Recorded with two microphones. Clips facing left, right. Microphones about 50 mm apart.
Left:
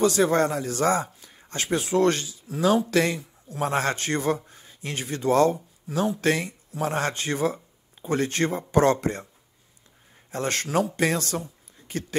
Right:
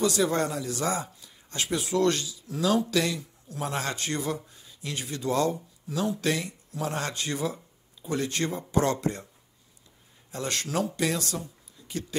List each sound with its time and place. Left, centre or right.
0.0 s speech: left
10.3 s speech: left